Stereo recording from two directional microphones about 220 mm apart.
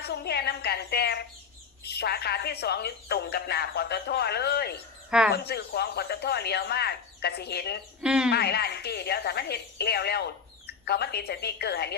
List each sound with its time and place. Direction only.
0.0 s a woman's voice: 45° left (ahead or behind)
8.0 s speech: 5° right (ahead or behind)
8.3 s a woman's voice: 45° left (ahead or behind)